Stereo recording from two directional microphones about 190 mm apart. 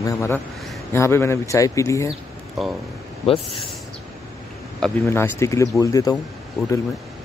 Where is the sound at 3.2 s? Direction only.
30° left (ahead or behind).